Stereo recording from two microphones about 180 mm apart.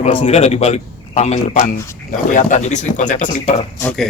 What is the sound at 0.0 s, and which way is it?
A man's voice, 35° left (ahead or behind).